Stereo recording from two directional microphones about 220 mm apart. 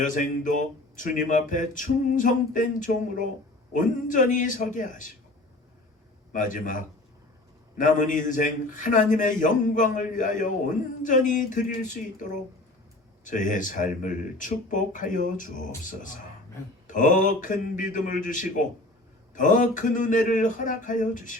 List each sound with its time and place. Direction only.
0.0 s speech: 35° left (ahead or behind)
6.3 s speech: 35° left (ahead or behind)